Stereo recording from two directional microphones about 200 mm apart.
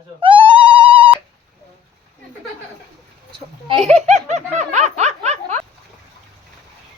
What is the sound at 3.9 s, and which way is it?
Laughter, 35° right (ahead or behind).